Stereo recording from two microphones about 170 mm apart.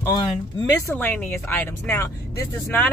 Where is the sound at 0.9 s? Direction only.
10° left (ahead or behind).